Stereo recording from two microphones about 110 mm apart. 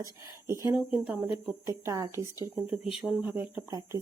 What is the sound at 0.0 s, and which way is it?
Speech, 30° right (ahead or behind).